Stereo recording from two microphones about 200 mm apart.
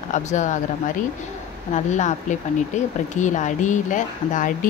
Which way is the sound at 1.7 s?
35° left (ahead or behind).